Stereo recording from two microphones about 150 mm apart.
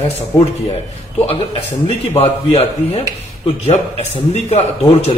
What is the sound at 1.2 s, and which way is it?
Speech, 45° left (ahead or behind).